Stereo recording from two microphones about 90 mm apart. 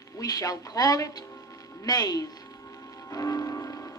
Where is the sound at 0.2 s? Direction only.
45° left (ahead or behind).